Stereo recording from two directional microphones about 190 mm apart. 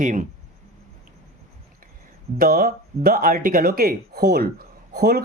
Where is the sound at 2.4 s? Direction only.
50° right (ahead or behind).